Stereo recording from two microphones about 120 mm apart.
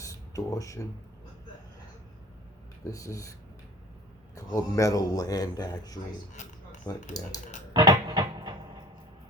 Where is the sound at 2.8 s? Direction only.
25° left (ahead or behind).